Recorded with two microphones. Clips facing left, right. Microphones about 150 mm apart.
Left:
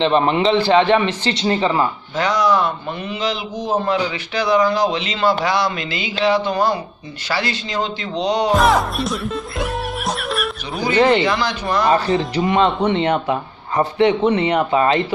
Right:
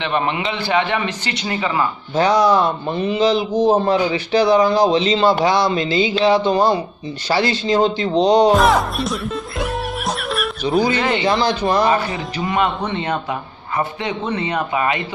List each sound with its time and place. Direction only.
0.0 s a man's voice: 30° left (ahead or behind)
2.1 s a man's voice: 30° right (ahead or behind)
8.5 s music: centre (ahead or behind)
11.2 s a man's voice: 30° right (ahead or behind)
12.2 s a man's voice: 25° left (ahead or behind)